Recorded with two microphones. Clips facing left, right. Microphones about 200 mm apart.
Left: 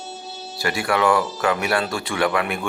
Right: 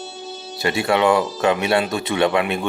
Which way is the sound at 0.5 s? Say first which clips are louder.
Right 3 dB; 25° right (ahead or behind).